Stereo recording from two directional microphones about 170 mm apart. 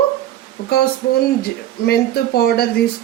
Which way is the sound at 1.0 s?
90° left.